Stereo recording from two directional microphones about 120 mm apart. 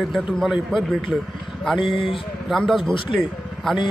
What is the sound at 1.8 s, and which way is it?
Speech, 45° left (ahead or behind).